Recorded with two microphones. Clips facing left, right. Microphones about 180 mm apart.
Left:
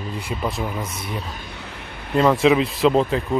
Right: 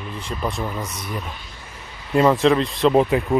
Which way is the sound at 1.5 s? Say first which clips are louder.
Left 5 dB; 70° left (ahead or behind).